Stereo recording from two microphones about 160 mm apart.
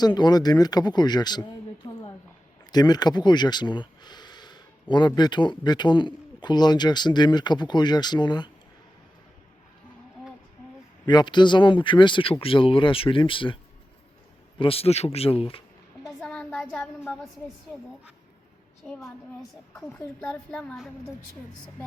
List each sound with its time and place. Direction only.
0.0 s speech: 25° left (ahead or behind)
11.0 s speech: 25° left (ahead or behind)
14.6 s speech: 35° left (ahead or behind)
16.2 s a sound: 5° left (ahead or behind)
18.9 s a woman's voice: centre (ahead or behind)
20.2 s a woman's voice: 5° left (ahead or behind)